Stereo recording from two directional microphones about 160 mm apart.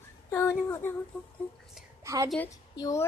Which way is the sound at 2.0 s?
20° right (ahead or behind).